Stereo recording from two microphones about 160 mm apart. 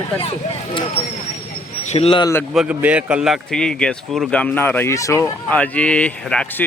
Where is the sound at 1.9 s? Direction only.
35° left (ahead or behind).